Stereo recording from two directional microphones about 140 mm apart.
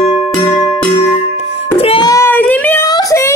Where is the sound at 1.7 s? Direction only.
45° left (ahead or behind).